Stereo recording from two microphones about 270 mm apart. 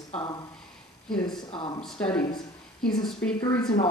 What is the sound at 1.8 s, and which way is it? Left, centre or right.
Speech, centre.